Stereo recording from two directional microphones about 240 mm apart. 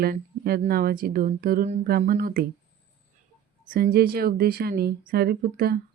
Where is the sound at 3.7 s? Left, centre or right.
Right.